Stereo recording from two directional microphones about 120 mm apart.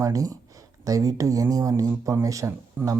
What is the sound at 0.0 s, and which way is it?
Speech, 30° right (ahead or behind).